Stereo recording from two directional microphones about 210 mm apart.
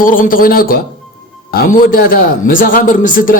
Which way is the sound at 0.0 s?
40° left (ahead or behind).